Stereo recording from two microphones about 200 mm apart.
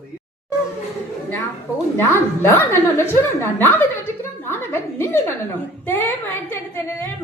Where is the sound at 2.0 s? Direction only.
15° left (ahead or behind).